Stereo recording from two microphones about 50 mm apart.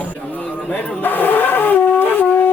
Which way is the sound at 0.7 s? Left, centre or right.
Left.